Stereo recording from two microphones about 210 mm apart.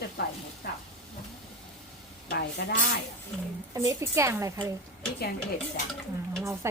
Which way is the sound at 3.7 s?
15° right (ahead or behind).